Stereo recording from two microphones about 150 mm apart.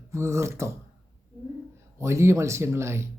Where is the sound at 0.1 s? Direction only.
20° right (ahead or behind).